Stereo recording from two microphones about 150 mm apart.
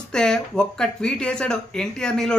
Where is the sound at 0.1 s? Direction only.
5° left (ahead or behind).